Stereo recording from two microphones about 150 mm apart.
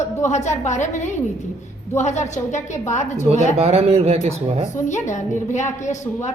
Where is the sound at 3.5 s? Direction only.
45° right (ahead or behind).